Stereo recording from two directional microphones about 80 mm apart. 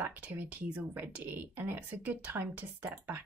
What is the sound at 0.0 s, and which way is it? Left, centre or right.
A woman's voice, right.